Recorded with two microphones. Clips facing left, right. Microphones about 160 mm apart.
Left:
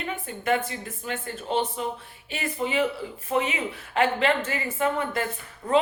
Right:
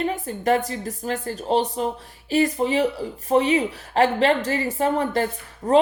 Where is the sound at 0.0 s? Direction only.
35° right (ahead or behind).